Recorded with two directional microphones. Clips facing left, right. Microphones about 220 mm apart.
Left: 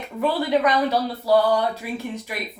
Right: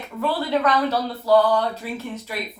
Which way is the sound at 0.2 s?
15° left (ahead or behind).